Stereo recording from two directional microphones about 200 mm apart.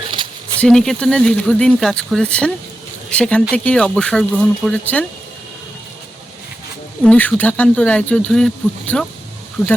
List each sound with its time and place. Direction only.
0.2 s a sound: 25° right (ahead or behind)
0.6 s speech: 5° left (ahead or behind)
7.0 s speech: 5° left (ahead or behind)